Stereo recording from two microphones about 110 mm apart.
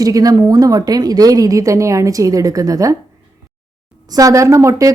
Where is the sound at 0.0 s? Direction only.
35° right (ahead or behind).